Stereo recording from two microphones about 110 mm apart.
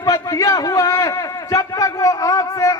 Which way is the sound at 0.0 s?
35° left (ahead or behind).